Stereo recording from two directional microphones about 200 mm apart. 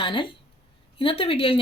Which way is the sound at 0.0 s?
25° left (ahead or behind).